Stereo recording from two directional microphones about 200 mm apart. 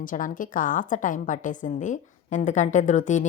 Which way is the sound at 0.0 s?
40° left (ahead or behind).